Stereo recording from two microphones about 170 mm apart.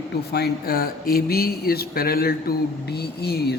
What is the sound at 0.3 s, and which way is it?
Speech, 70° left (ahead or behind).